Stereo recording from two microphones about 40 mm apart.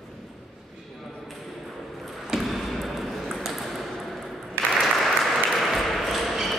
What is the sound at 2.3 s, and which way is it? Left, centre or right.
Ping, centre.